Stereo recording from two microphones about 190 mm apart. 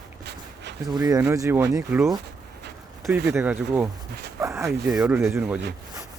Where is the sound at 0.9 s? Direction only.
20° right (ahead or behind).